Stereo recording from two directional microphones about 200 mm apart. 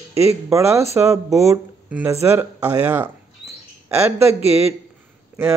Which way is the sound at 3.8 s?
15° right (ahead or behind).